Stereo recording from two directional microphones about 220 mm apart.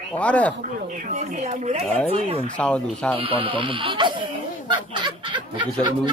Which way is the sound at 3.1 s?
25° right (ahead or behind).